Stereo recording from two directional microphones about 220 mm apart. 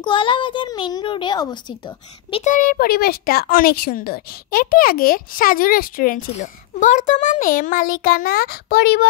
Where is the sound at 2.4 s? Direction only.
35° left (ahead or behind).